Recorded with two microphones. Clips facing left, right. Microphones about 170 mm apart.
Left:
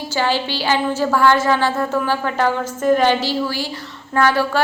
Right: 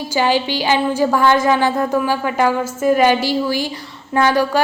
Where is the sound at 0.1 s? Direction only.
15° right (ahead or behind).